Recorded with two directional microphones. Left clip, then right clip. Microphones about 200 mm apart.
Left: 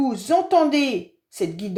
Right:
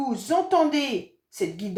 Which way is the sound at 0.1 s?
40° left (ahead or behind).